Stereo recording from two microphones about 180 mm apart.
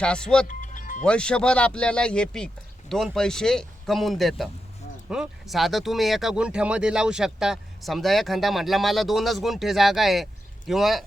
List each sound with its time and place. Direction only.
0.0 s speech: 5° left (ahead or behind)
0.4 s music: 45° left (ahead or behind)
1.0 s speech: 5° left (ahead or behind)